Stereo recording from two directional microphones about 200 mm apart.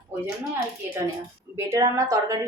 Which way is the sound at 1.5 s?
15° right (ahead or behind).